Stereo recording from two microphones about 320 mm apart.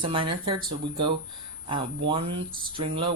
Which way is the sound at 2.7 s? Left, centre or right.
Centre.